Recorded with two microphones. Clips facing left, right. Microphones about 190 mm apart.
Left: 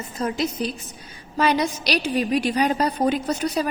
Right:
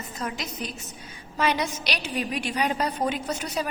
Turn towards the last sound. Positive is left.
turn(degrees=40)  # may be behind; listen again after turning